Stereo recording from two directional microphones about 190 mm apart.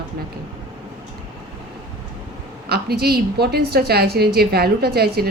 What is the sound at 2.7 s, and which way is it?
A woman's voice, 55° right (ahead or behind).